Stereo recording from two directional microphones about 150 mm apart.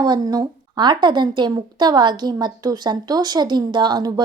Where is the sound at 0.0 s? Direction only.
25° right (ahead or behind).